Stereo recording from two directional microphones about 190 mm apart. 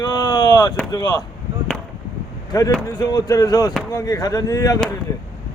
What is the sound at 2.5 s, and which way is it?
Speech, 20° left (ahead or behind).